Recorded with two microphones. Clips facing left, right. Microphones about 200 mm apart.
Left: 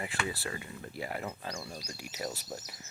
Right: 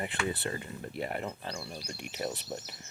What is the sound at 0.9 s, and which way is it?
Speech, 5° left (ahead or behind).